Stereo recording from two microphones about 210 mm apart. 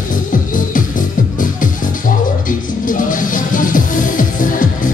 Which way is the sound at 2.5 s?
40° left (ahead or behind).